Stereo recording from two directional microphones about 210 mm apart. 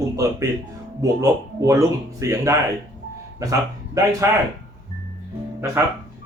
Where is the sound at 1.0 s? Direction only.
15° right (ahead or behind).